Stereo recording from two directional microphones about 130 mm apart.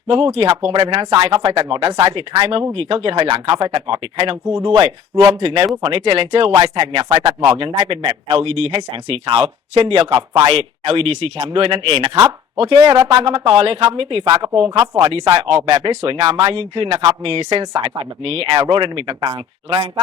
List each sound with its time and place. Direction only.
0.3 s speech: 45° right (ahead or behind)
1.9 s speech: 30° right (ahead or behind)
2.1 s speech: 40° right (ahead or behind)
13.1 s speech: 40° right (ahead or behind)
14.3 s speech: 30° right (ahead or behind)
14.5 s speech: 45° right (ahead or behind)
17.8 s speech: 45° right (ahead or behind)